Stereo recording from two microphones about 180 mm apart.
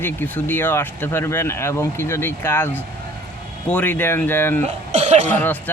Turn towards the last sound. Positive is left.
turn(degrees=10)  # may be behind; listen again after turning